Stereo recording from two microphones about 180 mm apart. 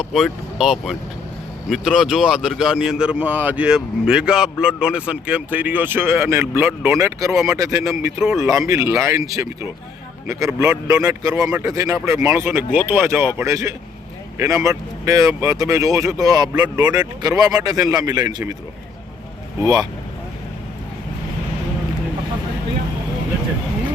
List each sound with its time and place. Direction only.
0.0 s speech: centre (ahead or behind); by 9.2 s 15° right (ahead or behind)
10.2 s speech: 15° right (ahead or behind)